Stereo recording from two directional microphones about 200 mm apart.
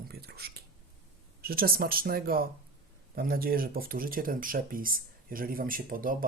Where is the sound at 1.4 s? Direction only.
50° right (ahead or behind).